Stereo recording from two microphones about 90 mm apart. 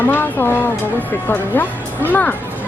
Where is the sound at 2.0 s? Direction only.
20° left (ahead or behind).